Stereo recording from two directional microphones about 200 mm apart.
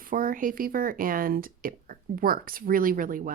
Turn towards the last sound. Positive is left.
turn(degrees=-45)  # may be behind; listen again after turning